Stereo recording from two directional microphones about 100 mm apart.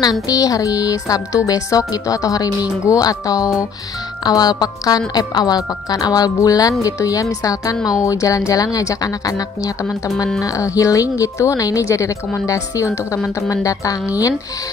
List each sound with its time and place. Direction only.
0.0 s speech: 35° left (ahead or behind)